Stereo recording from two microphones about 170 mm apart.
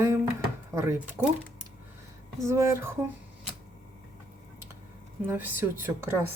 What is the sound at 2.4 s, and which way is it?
Speech, 15° right (ahead or behind).